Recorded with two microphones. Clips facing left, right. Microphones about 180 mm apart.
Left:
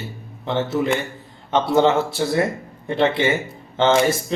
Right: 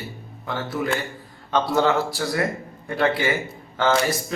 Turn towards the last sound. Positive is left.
turn(degrees=25)  # may be behind; listen again after turning